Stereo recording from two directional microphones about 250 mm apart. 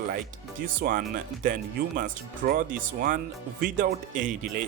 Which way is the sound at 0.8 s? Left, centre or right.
Right.